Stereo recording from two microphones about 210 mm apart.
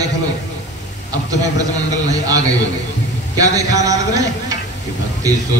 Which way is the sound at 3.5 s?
15° right (ahead or behind).